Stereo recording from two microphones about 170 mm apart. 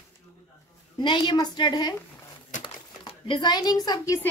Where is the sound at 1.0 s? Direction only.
30° left (ahead or behind).